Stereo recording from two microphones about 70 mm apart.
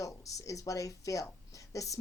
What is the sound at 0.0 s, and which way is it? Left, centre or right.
Speech, left.